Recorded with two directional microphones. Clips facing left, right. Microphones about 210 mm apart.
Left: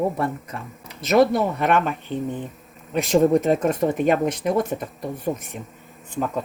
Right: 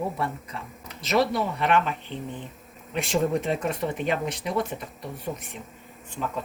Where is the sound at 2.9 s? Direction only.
40° left (ahead or behind).